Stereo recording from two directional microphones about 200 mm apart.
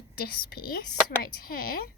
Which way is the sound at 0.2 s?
50° left (ahead or behind).